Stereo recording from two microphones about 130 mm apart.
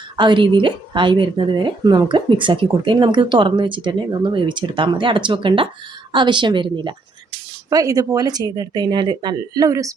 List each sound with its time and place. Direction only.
0.2 s speech: 40° right (ahead or behind)
7.7 s speech: 25° right (ahead or behind)